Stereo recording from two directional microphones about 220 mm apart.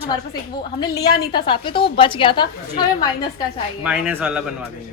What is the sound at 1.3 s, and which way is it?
A woman's voice, 20° left (ahead or behind).